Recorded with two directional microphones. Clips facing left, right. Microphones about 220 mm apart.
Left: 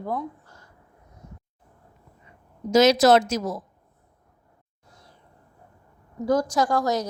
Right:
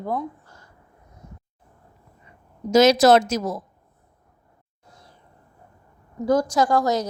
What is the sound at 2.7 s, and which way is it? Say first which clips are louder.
Speech: right 2 dB; 40° right (ahead or behind).